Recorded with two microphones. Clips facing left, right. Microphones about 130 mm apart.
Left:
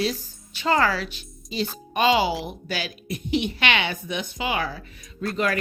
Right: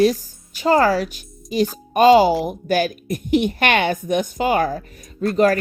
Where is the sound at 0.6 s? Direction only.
40° right (ahead or behind).